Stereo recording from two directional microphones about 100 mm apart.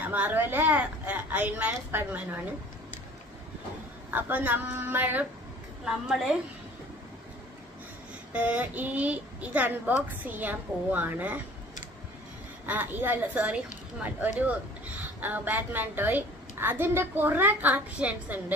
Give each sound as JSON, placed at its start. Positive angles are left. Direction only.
{"t": 0.0, "sound": "a woman's voice", "side_deg": -15}
{"t": 4.1, "sound": "a woman's voice", "side_deg": -15}
{"t": 5.9, "sound": "a woman's voice", "side_deg": -5}
{"t": 8.3, "sound": "a woman's voice", "side_deg": -15}
{"t": 12.6, "sound": "a woman's voice", "side_deg": -20}
{"t": 14.9, "sound": "a woman's voice", "side_deg": -15}